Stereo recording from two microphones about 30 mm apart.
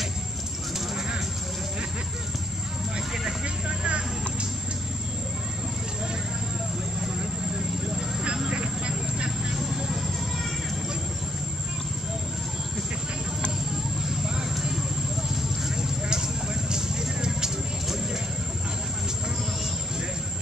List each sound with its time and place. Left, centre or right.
3.6 s vehicle: right
8.5 s vehicle: right
14.2 s vehicle: right
15.7 s vehicle: right